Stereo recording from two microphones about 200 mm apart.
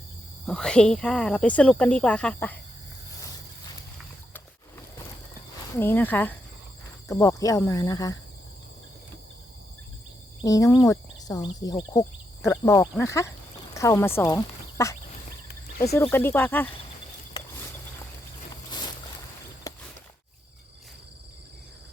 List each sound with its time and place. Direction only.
0.4 s speech: 5° left (ahead or behind)
5.7 s speech: 10° left (ahead or behind)
10.4 s speech: 15° left (ahead or behind)
16.0 s speech: 10° left (ahead or behind)
19.7 s a sound: 15° left (ahead or behind)